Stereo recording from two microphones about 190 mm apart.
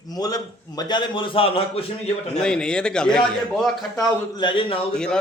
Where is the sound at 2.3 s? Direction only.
5° left (ahead or behind).